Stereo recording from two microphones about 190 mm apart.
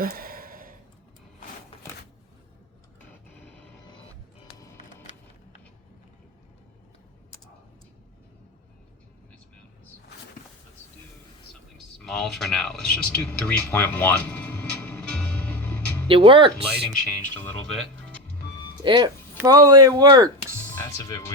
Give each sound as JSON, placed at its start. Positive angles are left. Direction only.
{"t": 0.0, "sound": "a sound", "side_deg": -50}
{"t": 12.0, "sound": "a sound", "side_deg": 0}
{"t": 16.0, "sound": "speech", "side_deg": -25}
{"t": 16.8, "sound": "speech", "side_deg": 5}
{"t": 18.8, "sound": "speech", "side_deg": -25}
{"t": 20.7, "sound": "music", "side_deg": 15}